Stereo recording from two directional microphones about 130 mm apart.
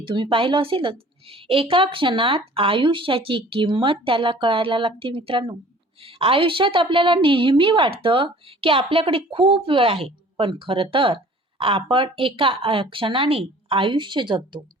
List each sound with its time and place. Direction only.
0.0 s a woman's voice: 40° right (ahead or behind)